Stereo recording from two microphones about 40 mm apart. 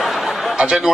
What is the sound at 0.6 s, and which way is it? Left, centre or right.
Speech, centre.